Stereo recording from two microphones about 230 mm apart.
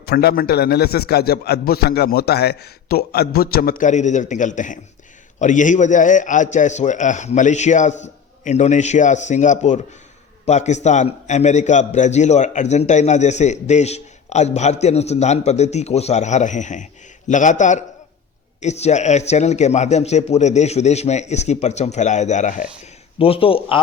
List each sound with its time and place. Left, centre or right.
0.0 s a man's voice: left